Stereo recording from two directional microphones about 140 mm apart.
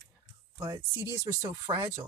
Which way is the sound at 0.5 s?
25° right (ahead or behind).